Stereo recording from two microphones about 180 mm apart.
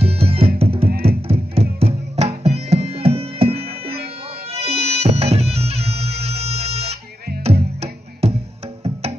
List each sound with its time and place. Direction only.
0.0 s music: 35° right (ahead or behind)
0.8 s music: 60° right (ahead or behind)
1.2 s music: 35° right (ahead or behind)
4.7 s music: 65° right (ahead or behind)
5.0 s music: 35° right (ahead or behind)